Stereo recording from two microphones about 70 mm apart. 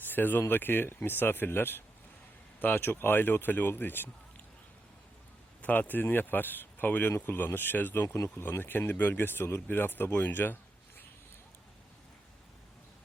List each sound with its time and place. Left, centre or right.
0.1 s speech: left
5.6 s speech: left
8.0 s speech: left
8.4 s speech: left
10.2 s a sound: left